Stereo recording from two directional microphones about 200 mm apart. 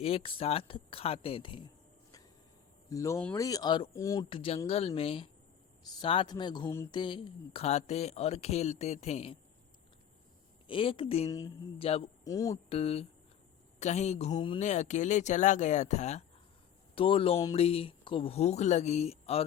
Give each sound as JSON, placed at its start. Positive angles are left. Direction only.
{"t": 0.0, "sound": "speech", "side_deg": 30}
{"t": 2.9, "sound": "speech", "side_deg": 15}
{"t": 10.7, "sound": "speech", "side_deg": 25}
{"t": 11.3, "sound": "speech", "side_deg": 15}
{"t": 11.9, "sound": "speech", "side_deg": 30}
{"t": 12.2, "sound": "speech", "side_deg": 15}
{"t": 12.6, "sound": "speech", "side_deg": 30}
{"t": 14.6, "sound": "speech", "side_deg": 35}